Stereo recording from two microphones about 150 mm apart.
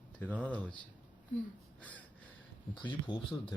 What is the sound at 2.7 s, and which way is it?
Speech, 35° left (ahead or behind).